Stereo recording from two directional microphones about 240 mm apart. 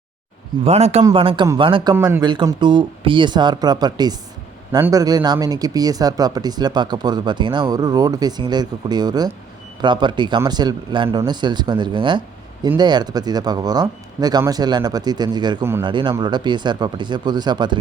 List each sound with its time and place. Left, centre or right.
0.6 s speech: right